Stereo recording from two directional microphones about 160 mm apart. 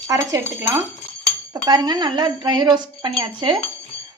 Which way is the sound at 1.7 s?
25° right (ahead or behind).